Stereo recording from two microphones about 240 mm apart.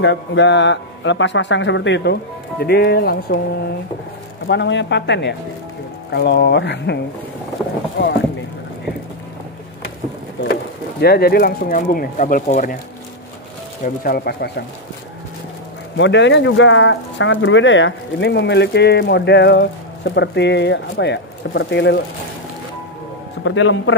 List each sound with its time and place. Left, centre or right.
0.0 s speech: left
4.5 s speech: left
10.4 s speech: left
13.8 s speech: left
16.0 s speech: left
23.4 s speech: left